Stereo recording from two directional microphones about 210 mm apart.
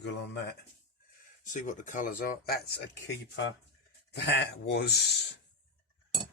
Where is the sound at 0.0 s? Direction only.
55° left (ahead or behind).